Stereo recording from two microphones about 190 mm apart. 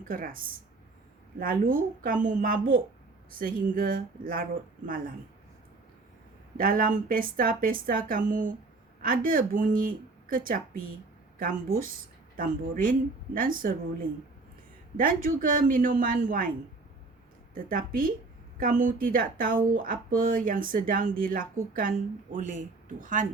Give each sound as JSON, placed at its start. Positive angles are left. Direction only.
{"t": 0.1, "sound": "speech", "side_deg": -50}
{"t": 6.6, "sound": "speech", "side_deg": -45}
{"t": 17.5, "sound": "speech", "side_deg": -45}